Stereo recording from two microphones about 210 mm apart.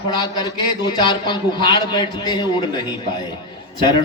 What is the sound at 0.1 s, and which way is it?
A man's voice, 20° left (ahead or behind).